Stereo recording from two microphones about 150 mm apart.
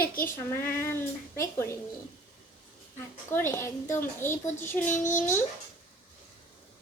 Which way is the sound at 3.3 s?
20° left (ahead or behind).